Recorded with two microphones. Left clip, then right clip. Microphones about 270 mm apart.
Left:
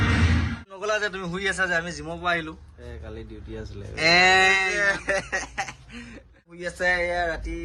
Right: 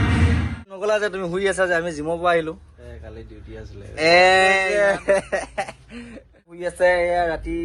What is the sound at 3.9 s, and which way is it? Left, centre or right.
Speech, centre.